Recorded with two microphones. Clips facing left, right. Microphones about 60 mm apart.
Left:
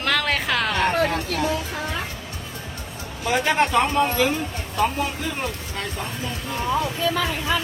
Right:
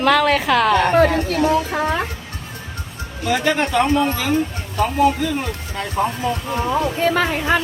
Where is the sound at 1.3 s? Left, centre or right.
Right.